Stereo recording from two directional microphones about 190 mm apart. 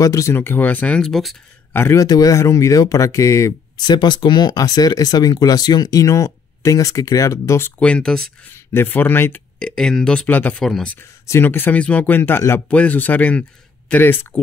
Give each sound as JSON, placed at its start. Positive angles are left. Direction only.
{"t": 0.0, "sound": "speech", "side_deg": 15}
{"t": 1.8, "sound": "speech", "side_deg": 15}